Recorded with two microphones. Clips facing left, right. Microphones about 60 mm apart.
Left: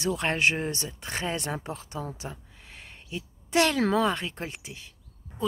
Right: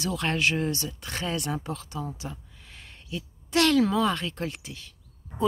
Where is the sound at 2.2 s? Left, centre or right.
Left.